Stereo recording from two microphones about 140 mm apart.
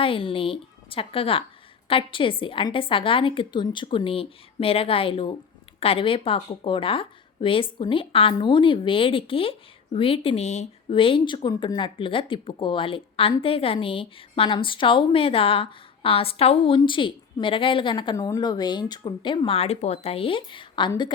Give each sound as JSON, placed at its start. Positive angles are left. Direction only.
{"t": 0.0, "sound": "speech", "side_deg": 40}
{"t": 10.9, "sound": "speech", "side_deg": 40}